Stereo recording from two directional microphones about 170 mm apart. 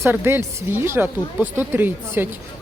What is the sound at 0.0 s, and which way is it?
Speech, 15° right (ahead or behind).